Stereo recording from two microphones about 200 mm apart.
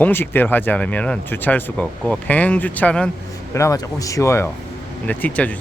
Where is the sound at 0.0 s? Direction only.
10° left (ahead or behind).